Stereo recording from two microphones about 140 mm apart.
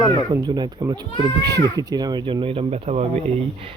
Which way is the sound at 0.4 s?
30° right (ahead or behind).